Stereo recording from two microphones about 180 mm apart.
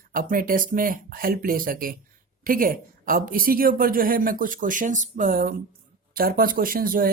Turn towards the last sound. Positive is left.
turn(degrees=-50)  # may be behind; listen again after turning